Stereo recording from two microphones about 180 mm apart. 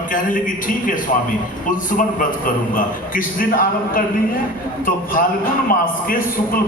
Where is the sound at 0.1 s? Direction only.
50° left (ahead or behind).